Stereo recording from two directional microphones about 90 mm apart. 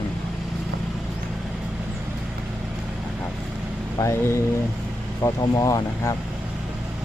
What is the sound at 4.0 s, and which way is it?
Speech, 35° left (ahead or behind).